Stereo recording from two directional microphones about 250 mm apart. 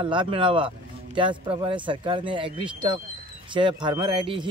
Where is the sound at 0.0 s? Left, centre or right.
Centre.